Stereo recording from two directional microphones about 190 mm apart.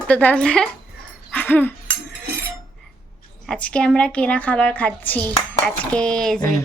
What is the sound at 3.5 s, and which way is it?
Speech, 5° left (ahead or behind).